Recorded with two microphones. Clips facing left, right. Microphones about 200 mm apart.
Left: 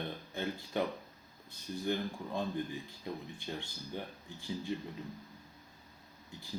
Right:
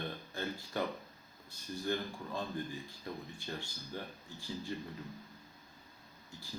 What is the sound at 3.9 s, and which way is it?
Speech, 20° left (ahead or behind).